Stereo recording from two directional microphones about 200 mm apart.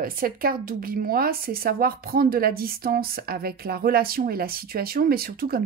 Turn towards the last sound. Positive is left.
turn(degrees=-50)  # may be behind; listen again after turning